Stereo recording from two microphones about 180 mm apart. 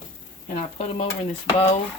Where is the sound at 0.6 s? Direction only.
35° left (ahead or behind).